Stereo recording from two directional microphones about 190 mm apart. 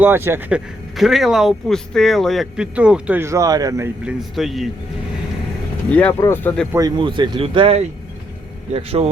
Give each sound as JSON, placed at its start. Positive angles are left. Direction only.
{"t": 0.0, "sound": "speech", "side_deg": -10}
{"t": 4.4, "sound": "speech", "side_deg": 0}
{"t": 5.9, "sound": "speech", "side_deg": 10}
{"t": 6.7, "sound": "speech", "side_deg": -25}